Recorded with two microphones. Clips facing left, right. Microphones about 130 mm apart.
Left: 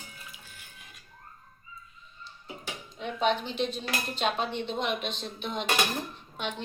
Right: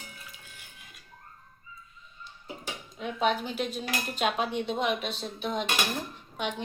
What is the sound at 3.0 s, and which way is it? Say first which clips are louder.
Speech: even; 5° right (ahead or behind).